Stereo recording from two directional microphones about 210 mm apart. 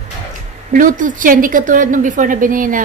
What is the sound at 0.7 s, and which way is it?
A woman's voice, 40° right (ahead or behind).